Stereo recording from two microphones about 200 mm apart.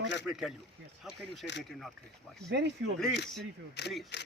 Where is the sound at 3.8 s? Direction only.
55° left (ahead or behind).